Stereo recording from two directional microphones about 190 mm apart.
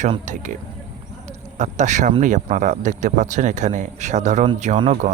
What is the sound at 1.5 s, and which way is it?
Speech, 35° right (ahead or behind).